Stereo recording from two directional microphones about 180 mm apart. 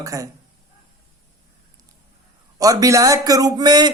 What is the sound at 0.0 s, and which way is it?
Speech, 20° right (ahead or behind).